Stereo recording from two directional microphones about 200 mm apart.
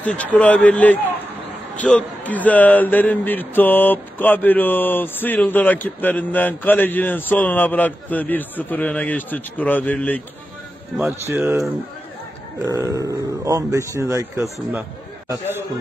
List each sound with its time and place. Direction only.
0.0 s speech: 5° left (ahead or behind)
11.0 s speech: 10° right (ahead or behind)
12.6 s a man's voice: 15° right (ahead or behind)